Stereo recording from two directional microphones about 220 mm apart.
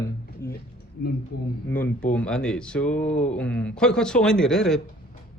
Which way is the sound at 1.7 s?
10° left (ahead or behind).